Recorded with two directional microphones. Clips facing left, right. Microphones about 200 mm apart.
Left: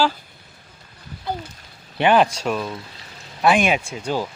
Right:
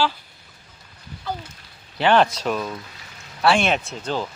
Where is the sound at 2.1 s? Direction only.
10° left (ahead or behind).